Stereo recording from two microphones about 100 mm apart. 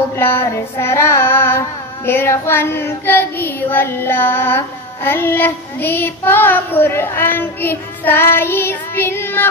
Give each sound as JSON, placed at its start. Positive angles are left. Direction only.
{"t": 0.1, "sound": "child singing", "side_deg": 25}